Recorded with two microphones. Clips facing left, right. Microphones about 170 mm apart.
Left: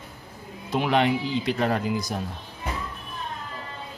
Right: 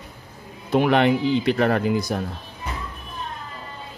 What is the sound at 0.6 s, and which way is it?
Speech, 55° right (ahead or behind).